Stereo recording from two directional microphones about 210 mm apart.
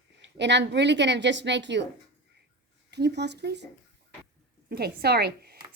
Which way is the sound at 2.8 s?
55° right (ahead or behind).